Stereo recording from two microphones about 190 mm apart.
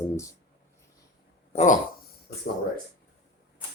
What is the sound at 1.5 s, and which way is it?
Speech, 35° left (ahead or behind).